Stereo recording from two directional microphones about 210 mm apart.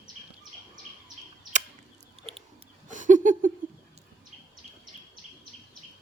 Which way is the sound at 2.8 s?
35° right (ahead or behind).